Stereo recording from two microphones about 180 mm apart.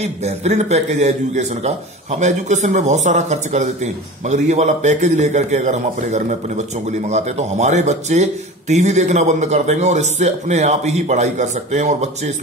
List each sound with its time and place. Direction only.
0.0 s a man's voice: 35° right (ahead or behind)